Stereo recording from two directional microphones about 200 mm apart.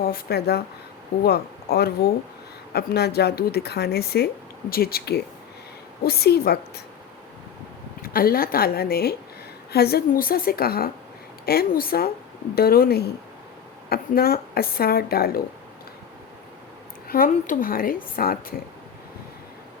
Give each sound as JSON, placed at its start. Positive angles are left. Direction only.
{"t": 0.0, "sound": "speech", "side_deg": 50}
{"t": 8.0, "sound": "speech", "side_deg": 45}
{"t": 17.1, "sound": "speech", "side_deg": 45}